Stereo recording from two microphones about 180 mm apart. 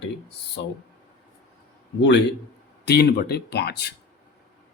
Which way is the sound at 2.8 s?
65° left (ahead or behind).